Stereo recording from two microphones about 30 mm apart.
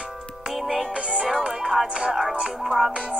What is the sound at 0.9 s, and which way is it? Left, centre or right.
Music, right.